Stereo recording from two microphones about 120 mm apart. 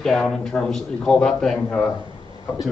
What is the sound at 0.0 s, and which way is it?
A man's voice, 5° left (ahead or behind).